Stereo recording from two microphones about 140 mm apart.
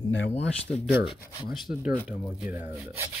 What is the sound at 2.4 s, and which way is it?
Rub, 15° right (ahead or behind).